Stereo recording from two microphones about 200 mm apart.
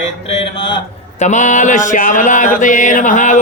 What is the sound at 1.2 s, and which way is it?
Music, 35° left (ahead or behind).